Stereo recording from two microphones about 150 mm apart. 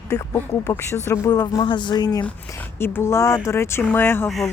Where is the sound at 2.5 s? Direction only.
15° left (ahead or behind).